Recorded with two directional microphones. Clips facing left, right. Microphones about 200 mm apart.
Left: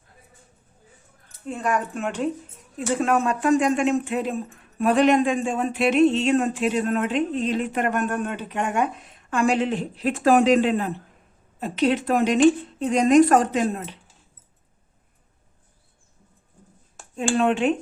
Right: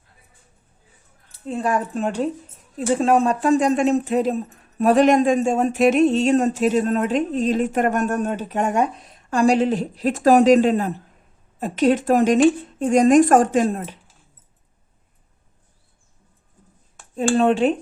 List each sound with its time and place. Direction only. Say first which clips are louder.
1.3 s a woman's voice: right 3 dB; 30° right (ahead or behind)
17.2 s speech: right 4 dB; 35° right (ahead or behind)